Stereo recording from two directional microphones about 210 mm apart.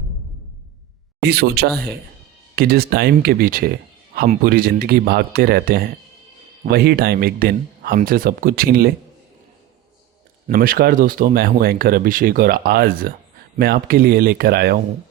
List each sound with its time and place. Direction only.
1.2 s speech: 50° right (ahead or behind)
10.4 s speech: 40° right (ahead or behind)